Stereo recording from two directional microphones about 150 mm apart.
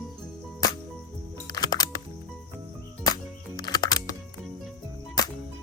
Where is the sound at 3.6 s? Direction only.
25° left (ahead or behind).